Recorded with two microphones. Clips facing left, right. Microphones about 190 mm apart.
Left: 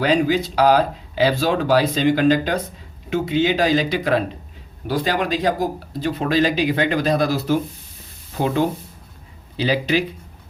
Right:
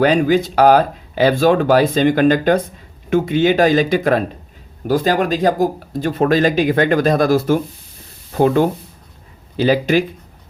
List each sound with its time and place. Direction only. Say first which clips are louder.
0.0 s speech: right 4 dB; 50° right (ahead or behind)